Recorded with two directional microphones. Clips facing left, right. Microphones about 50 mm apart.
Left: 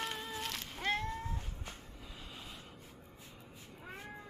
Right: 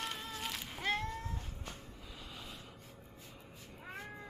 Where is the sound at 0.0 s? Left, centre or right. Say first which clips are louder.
Left 1 dB; centre.